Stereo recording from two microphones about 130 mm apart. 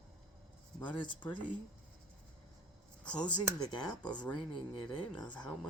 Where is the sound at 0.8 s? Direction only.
40° left (ahead or behind).